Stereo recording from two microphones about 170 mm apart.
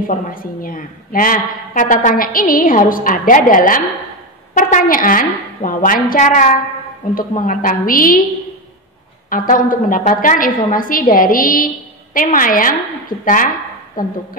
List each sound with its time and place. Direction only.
0.0 s a woman's voice: 55° left (ahead or behind)
9.3 s a woman's voice: 55° left (ahead or behind)